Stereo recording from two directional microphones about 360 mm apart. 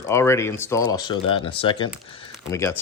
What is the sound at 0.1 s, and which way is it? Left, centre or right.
Speech, centre.